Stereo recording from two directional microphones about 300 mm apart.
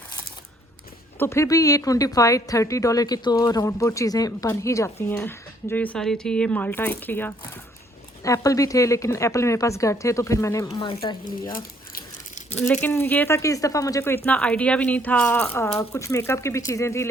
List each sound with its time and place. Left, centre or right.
1.2 s a woman's voice: centre
12.3 s a sound: left
12.8 s a woman's voice: centre